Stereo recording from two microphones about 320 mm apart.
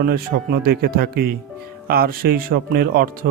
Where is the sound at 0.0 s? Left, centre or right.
Right.